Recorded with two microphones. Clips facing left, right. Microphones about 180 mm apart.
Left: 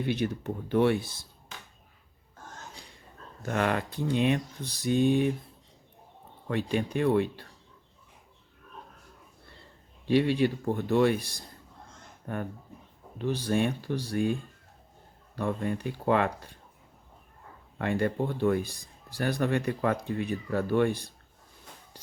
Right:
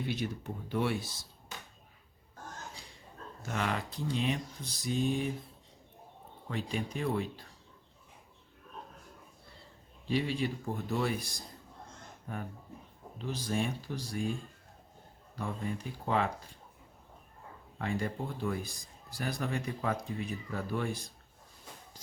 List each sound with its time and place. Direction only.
0.0 s speech: 60° left (ahead or behind)
3.4 s speech: 55° left (ahead or behind)
6.5 s speech: 65° left (ahead or behind)
10.1 s speech: 65° left (ahead or behind)
15.4 s speech: 65° left (ahead or behind)
17.7 s speech: 65° left (ahead or behind)